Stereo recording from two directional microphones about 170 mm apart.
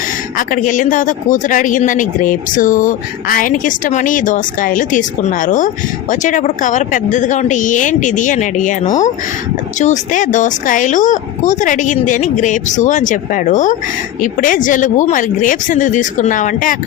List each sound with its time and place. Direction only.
0.3 s speech: 50° left (ahead or behind)